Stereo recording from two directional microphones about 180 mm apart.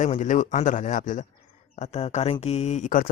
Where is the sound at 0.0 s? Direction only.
45° left (ahead or behind).